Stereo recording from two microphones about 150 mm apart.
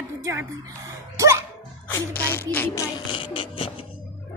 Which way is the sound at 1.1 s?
20° right (ahead or behind).